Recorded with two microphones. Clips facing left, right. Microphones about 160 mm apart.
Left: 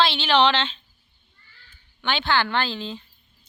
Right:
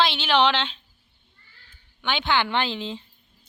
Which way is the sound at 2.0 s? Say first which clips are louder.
Left 1 dB; 10° right (ahead or behind).